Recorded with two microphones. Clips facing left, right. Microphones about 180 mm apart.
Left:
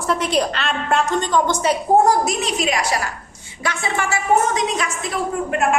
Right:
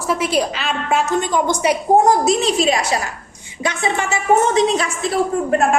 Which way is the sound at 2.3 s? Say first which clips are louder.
Right 5 dB; 30° right (ahead or behind).